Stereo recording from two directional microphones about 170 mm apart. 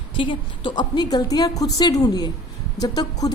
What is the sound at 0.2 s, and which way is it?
Speech, 30° left (ahead or behind).